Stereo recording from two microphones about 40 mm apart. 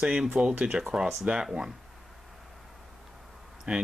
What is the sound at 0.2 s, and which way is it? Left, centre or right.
Speech, right.